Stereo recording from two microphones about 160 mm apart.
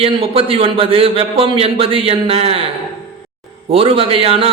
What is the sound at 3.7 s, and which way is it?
Speech, 35° right (ahead or behind).